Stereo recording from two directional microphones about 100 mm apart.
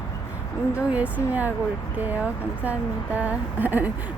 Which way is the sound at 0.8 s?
15° right (ahead or behind).